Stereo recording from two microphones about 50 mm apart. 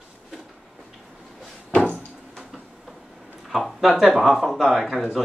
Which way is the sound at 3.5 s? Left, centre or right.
Centre.